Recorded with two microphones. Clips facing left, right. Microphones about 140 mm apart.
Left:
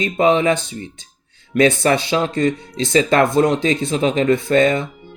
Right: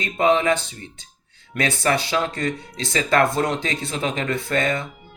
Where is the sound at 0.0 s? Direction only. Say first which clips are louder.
Left 4 dB; 20° left (ahead or behind).